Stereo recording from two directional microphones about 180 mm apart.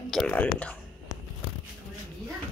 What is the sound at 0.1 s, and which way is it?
Speech, 5° left (ahead or behind).